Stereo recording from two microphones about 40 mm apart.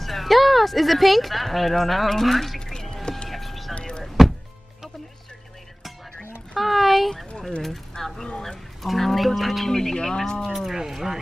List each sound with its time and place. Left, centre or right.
0.0 s speech: centre
2.6 s music: centre
3.3 s vehicle: centre
3.7 s a sound: left
6.5 s speech: centre
7.9 s speech: centre
10.5 s speech: centre